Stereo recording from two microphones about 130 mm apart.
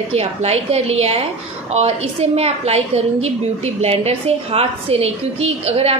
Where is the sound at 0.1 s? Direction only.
55° right (ahead or behind).